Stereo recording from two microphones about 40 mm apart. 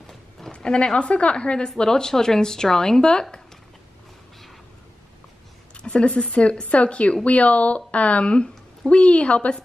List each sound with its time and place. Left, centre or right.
0.6 s a woman's voice: centre
5.8 s a woman's voice: left